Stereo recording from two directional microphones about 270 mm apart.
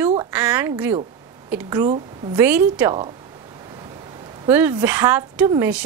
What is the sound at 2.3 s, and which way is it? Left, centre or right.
Speech, centre.